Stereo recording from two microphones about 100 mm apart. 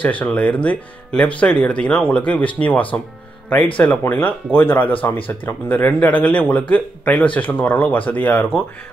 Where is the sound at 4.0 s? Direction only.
20° left (ahead or behind).